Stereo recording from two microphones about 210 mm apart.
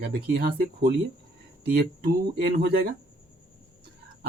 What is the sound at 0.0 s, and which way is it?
Speech, 50° right (ahead or behind).